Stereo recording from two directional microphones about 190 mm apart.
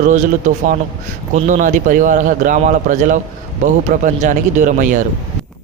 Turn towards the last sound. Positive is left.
turn(degrees=-40)  # may be behind; listen again after turning